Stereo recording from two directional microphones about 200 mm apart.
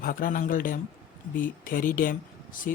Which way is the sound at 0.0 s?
45° left (ahead or behind).